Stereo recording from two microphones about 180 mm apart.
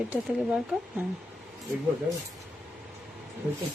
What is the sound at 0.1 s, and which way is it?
Speech, 10° right (ahead or behind).